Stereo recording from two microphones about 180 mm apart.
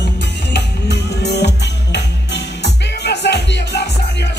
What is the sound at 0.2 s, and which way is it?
Music, 70° left (ahead or behind).